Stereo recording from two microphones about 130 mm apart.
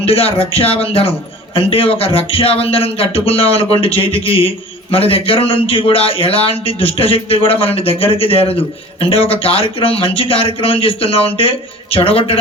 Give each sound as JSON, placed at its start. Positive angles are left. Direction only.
{"t": 0.0, "sound": "a man's voice", "side_deg": 50}